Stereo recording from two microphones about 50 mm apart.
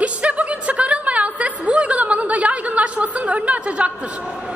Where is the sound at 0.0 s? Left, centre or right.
Right.